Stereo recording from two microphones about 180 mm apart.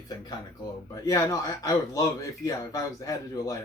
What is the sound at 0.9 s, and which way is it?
Speech, 20° left (ahead or behind).